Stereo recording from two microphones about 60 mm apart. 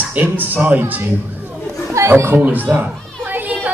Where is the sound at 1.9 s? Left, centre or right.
Right.